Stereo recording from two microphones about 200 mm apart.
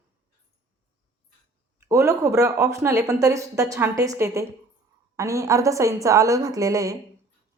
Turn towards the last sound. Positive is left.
turn(degrees=-15)  # may be behind; listen again after turning